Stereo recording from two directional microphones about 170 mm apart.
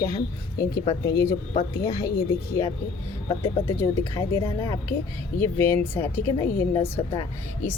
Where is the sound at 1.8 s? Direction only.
20° left (ahead or behind).